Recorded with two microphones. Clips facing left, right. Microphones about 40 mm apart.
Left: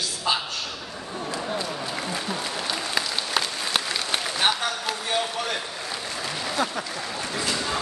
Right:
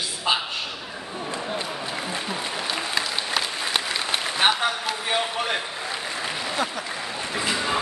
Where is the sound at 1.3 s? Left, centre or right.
Right.